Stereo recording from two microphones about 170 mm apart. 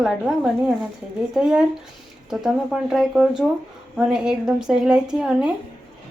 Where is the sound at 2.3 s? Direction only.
5° right (ahead or behind).